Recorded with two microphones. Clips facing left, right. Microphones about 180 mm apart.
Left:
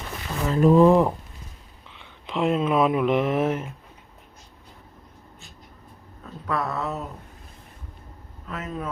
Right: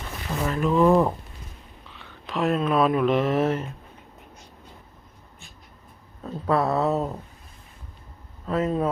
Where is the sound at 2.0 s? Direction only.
20° left (ahead or behind).